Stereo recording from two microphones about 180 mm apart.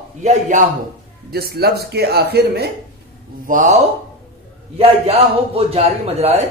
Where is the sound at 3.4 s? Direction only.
45° right (ahead or behind).